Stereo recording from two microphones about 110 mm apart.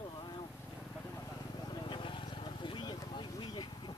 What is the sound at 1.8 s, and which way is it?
Vehicle, 50° left (ahead or behind).